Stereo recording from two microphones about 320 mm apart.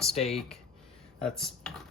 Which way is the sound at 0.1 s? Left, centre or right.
Centre.